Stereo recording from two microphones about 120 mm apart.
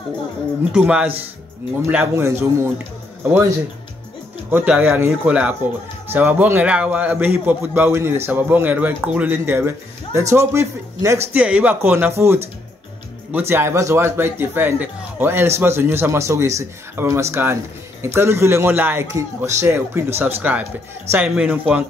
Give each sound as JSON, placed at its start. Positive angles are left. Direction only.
{"t": 0.7, "sound": "a man's voice", "side_deg": -5}
{"t": 1.9, "sound": "speech", "side_deg": -20}
{"t": 4.5, "sound": "a man's voice", "side_deg": -15}
{"t": 11.3, "sound": "a man's voice", "side_deg": -10}